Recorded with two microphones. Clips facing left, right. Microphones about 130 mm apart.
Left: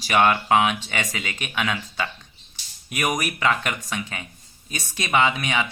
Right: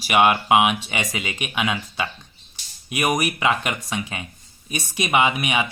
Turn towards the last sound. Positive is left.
turn(degrees=-15)  # may be behind; listen again after turning